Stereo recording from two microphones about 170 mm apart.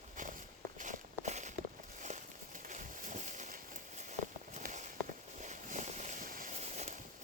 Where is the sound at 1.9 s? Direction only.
45° right (ahead or behind).